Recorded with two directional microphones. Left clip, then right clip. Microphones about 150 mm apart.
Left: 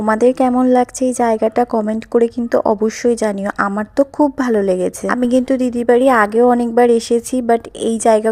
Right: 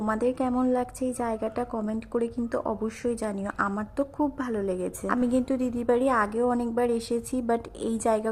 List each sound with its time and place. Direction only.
0.0 s a woman's voice: 40° left (ahead or behind)